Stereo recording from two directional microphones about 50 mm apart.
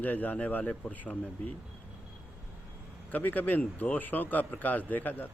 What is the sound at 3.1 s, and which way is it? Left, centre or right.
Speech, left.